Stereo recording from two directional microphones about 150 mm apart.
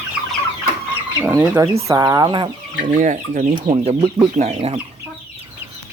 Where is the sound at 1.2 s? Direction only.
15° right (ahead or behind); by 2.9 s 30° right (ahead or behind).